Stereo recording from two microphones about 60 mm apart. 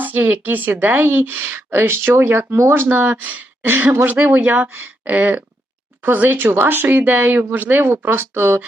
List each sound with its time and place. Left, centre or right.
0.0 s speech: right
2.6 s speech: right
2.8 s speech: right